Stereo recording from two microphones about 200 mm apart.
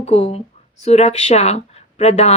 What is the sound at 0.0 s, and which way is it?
A woman's voice, 30° left (ahead or behind).